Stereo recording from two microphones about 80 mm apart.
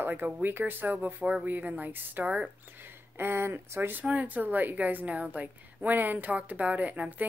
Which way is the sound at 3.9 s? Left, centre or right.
Centre.